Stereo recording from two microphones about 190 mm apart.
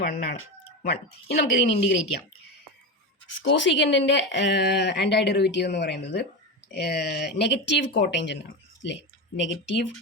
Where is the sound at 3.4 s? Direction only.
70° left (ahead or behind).